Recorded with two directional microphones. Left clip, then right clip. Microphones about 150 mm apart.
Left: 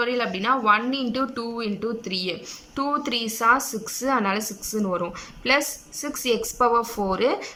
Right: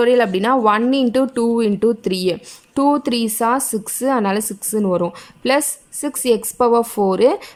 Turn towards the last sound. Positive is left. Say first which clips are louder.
# right 8 dB
turn(degrees=-30)  # may be behind; listen again after turning